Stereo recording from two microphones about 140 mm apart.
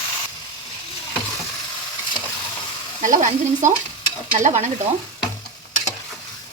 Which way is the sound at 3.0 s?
60° right (ahead or behind).